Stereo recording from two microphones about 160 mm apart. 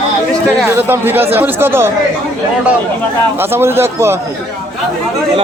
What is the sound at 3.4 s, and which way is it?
Speech, 15° right (ahead or behind).